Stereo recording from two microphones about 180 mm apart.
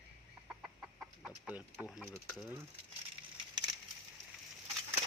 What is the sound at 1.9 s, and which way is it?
Speech, centre (ahead or behind).